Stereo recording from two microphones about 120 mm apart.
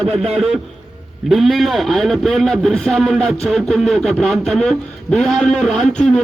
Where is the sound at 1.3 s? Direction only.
Centre (ahead or behind).